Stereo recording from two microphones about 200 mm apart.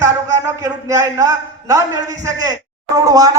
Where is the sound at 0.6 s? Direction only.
15° right (ahead or behind).